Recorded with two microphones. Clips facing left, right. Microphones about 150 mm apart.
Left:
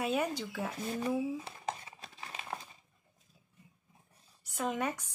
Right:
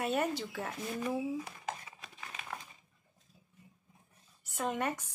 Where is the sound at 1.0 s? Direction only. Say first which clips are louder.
Left 1 dB; 30° left (ahead or behind).